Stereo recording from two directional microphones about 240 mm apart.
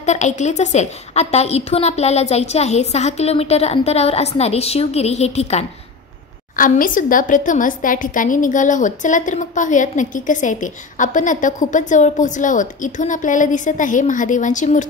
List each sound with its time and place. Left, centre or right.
0.0 s a woman's voice: left